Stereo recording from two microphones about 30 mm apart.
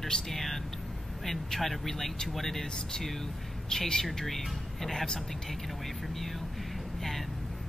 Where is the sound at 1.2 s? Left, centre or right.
Centre.